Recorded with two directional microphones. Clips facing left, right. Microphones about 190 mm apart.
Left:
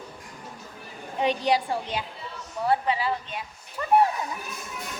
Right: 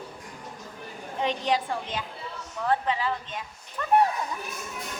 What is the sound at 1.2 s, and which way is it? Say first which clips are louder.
A woman's voice: left 3 dB; 10° left (ahead or behind).